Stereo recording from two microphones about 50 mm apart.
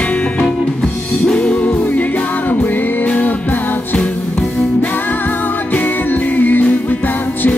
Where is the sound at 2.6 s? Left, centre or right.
Left.